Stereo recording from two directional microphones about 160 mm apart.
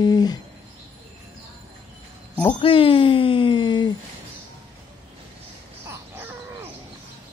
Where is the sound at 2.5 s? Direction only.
35° left (ahead or behind).